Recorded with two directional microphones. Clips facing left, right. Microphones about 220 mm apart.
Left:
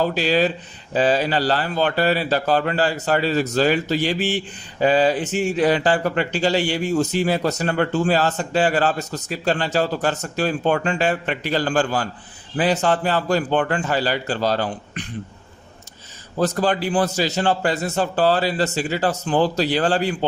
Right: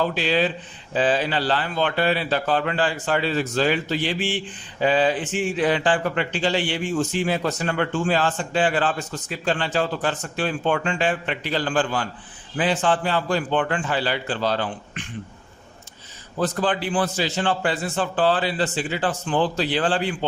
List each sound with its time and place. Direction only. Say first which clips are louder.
0.0 s a man's voice: left 3 dB; 40° left (ahead or behind)
16.4 s a man's voice: left 3 dB; 40° left (ahead or behind)